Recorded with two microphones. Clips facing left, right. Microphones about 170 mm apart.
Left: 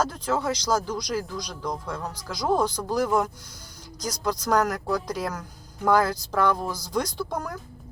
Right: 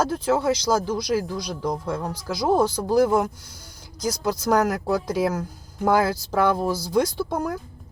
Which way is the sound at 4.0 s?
10° right (ahead or behind).